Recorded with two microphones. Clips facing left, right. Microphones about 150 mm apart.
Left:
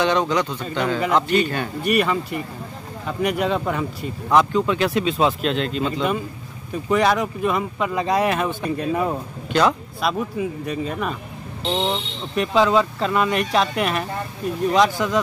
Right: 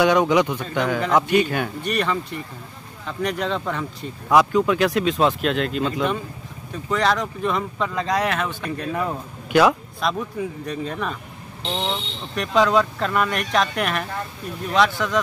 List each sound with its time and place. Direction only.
0.0 s speech: 10° right (ahead or behind)
1.9 s speech: 10° left (ahead or behind)
4.3 s speech: centre (ahead or behind); by 9.1 s 15° left (ahead or behind)
9.5 s speech: 5° right (ahead or behind)
10.0 s speech: 5° left (ahead or behind)
11.7 s speech: 20° left (ahead or behind)
12.4 s speech: 5° left (ahead or behind)